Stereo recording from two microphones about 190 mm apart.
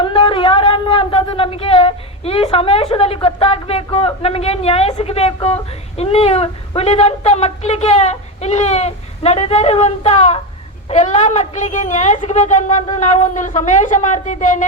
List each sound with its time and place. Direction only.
0.0 s speech: 25° left (ahead or behind)